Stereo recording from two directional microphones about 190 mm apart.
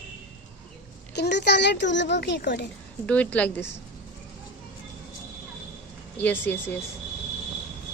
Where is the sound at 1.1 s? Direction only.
60° left (ahead or behind).